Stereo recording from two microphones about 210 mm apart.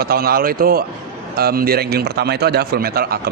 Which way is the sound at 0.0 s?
45° right (ahead or behind).